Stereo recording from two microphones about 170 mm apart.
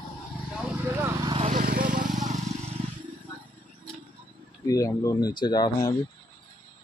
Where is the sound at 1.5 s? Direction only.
55° right (ahead or behind).